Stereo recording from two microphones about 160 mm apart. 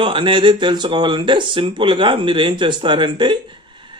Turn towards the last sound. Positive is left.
turn(degrees=-30)  # may be behind; listen again after turning